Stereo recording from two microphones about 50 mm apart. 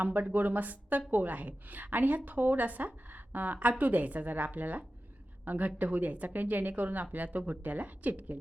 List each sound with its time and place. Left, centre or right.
0.0 s a woman's voice: right